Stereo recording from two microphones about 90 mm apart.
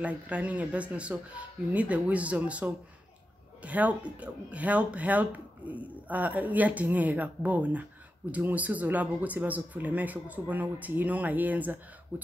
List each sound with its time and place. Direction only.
0.0 s speech: 15° right (ahead or behind)